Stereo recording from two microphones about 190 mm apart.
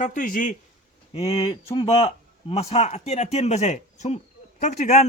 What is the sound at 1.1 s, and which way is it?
Speech, 30° left (ahead or behind).